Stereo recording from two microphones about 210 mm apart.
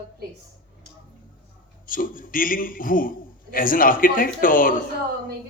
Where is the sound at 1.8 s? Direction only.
40° left (ahead or behind).